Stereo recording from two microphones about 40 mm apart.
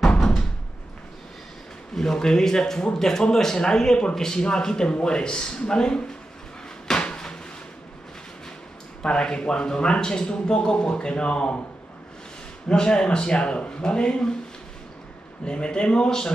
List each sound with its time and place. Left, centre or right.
2.0 s speech: centre
7.0 s a sound: left
9.0 s speech: left
12.6 s speech: left
15.4 s speech: left